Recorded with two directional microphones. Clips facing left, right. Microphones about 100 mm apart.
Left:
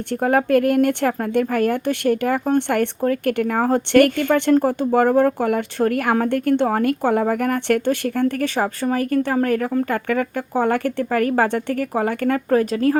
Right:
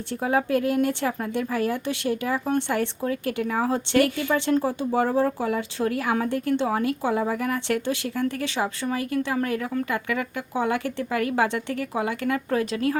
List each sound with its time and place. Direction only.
0.1 s speech: 55° left (ahead or behind); by 13.0 s 40° left (ahead or behind)